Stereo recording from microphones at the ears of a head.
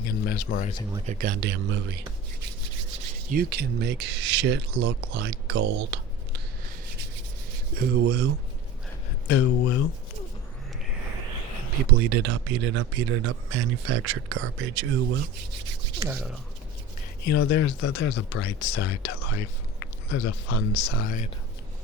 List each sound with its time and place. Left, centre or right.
0.0 s speech: left
1.0 s speech: right
7.5 s speech: right
9.2 s speech: left
11.8 s speech: right
17.2 s speech: left